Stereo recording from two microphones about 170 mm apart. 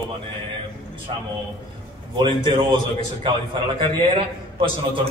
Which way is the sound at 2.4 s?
25° right (ahead or behind).